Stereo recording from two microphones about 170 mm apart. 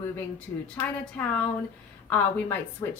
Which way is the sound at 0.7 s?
10° left (ahead or behind).